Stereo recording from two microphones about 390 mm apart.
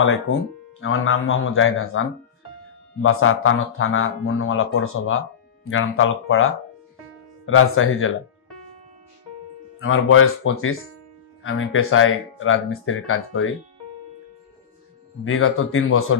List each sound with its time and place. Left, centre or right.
0.0 s speech: left
9.8 s speech: left
15.2 s speech: left